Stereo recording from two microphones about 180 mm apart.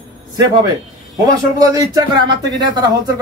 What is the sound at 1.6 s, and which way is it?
Speech, 20° right (ahead or behind).